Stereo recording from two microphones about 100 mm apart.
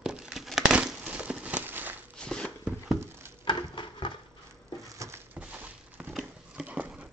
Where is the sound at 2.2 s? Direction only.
10° left (ahead or behind).